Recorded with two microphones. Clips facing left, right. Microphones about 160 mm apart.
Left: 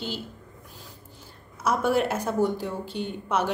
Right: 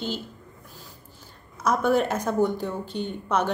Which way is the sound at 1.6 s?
5° left (ahead or behind).